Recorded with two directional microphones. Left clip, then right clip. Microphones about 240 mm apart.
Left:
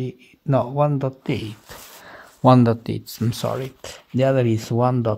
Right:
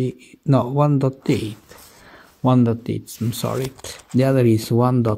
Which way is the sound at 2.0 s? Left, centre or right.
Centre.